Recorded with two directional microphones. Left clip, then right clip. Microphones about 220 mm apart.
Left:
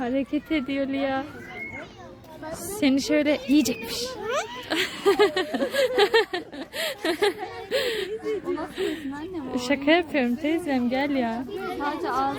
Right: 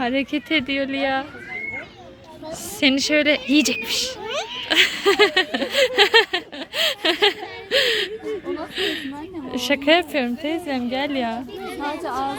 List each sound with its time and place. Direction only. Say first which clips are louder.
0.0 s speech: right 4 dB; 5° right (ahead or behind)
2.8 s speech: right 5 dB; 5° left (ahead or behind)
9.5 s a woman's voice: right 4 dB; centre (ahead or behind)
11.9 s chatter: right 1 dB; 30° right (ahead or behind)